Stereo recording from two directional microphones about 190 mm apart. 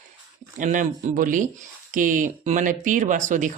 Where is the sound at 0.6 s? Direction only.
45° right (ahead or behind).